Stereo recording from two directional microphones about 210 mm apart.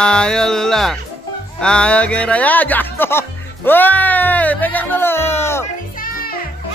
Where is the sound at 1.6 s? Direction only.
5° left (ahead or behind).